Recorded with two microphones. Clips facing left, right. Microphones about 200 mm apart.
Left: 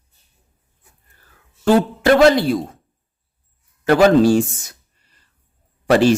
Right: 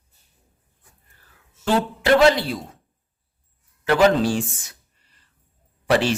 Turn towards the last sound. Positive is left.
turn(degrees=45)  # may be behind; listen again after turning